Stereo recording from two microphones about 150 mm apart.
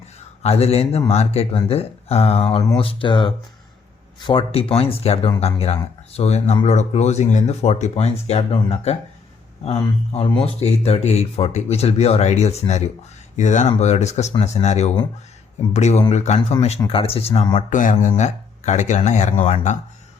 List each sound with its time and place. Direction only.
0.4 s speech: 45° left (ahead or behind)
10.1 s speech: 40° left (ahead or behind)
17.7 s speech: 60° left (ahead or behind)